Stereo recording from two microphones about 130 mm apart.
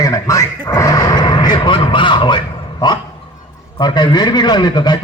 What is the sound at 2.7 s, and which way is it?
Dog, 30° left (ahead or behind).